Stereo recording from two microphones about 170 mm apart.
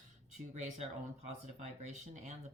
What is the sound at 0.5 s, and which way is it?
Speech, 45° right (ahead or behind).